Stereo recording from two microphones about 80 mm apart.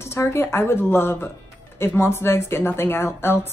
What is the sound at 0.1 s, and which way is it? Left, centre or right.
A woman's voice, left.